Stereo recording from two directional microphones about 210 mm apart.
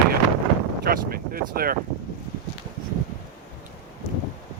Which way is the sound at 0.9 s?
45° right (ahead or behind).